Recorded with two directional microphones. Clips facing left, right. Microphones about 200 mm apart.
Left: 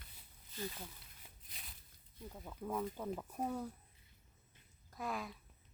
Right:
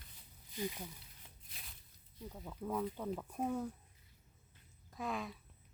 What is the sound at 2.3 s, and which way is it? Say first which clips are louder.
Speech: right 1 dB; centre (ahead or behind).